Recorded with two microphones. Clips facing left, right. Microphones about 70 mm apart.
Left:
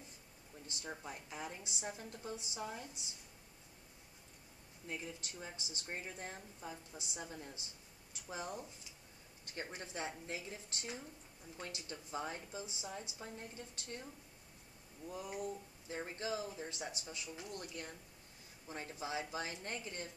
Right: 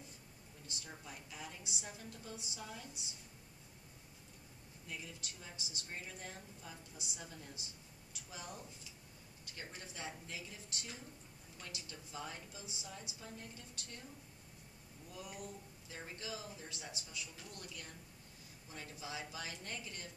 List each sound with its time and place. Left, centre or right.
0.7 s speech: left
4.8 s a woman's voice: left
15.0 s a woman's voice: left